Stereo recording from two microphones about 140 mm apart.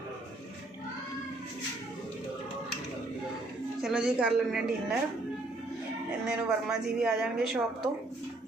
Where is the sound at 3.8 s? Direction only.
5° right (ahead or behind).